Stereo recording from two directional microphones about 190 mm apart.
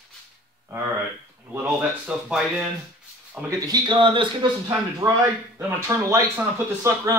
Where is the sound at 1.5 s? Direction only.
5° right (ahead or behind); by 4.5 s 25° right (ahead or behind).